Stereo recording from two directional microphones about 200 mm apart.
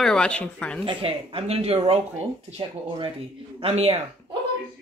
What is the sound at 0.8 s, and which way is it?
Speech, 30° right (ahead or behind).